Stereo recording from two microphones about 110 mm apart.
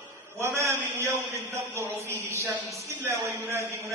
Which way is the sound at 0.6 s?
25° right (ahead or behind).